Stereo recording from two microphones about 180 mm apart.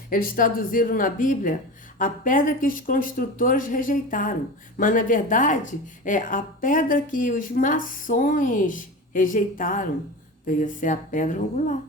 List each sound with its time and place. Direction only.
0.1 s speech: 50° left (ahead or behind)